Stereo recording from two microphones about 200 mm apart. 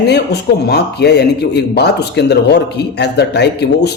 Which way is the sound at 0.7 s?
55° left (ahead or behind).